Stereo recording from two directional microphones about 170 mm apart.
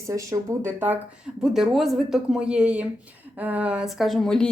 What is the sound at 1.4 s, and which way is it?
Speech, centre (ahead or behind).